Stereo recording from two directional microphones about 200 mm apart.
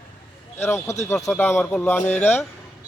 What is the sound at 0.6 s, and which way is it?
Speech, 15° left (ahead or behind).